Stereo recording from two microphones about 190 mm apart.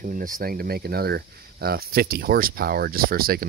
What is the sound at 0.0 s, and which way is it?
Speech, 45° right (ahead or behind).